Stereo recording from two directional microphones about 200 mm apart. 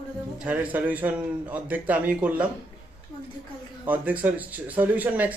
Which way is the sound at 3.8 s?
10° right (ahead or behind).